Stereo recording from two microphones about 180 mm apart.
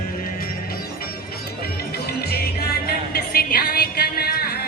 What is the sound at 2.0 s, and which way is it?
Music, 60° left (ahead or behind).